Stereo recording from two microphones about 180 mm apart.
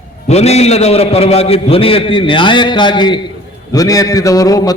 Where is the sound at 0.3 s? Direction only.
35° left (ahead or behind).